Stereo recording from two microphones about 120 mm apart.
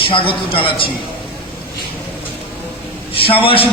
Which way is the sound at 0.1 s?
50° left (ahead or behind).